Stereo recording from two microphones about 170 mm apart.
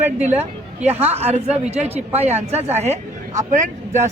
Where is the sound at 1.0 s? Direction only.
40° right (ahead or behind).